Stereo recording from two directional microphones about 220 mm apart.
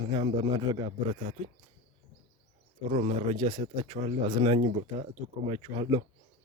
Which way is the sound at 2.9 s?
30° right (ahead or behind).